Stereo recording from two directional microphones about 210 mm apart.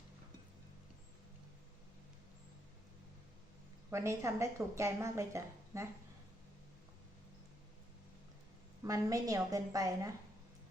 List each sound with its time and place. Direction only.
3.8 s a woman's voice: 15° right (ahead or behind)
8.8 s a woman's voice: 15° right (ahead or behind)